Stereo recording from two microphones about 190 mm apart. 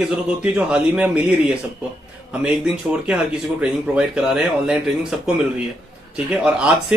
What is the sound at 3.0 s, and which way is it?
Speech, 5° right (ahead or behind).